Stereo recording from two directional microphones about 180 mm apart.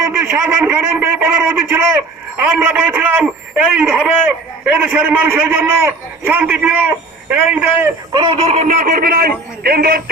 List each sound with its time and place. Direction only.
0.0 s a sound: 15° right (ahead or behind)
2.4 s a man's voice: 10° right (ahead or behind)
8.1 s a man's voice: 30° right (ahead or behind); by 10.0 s 60° right (ahead or behind)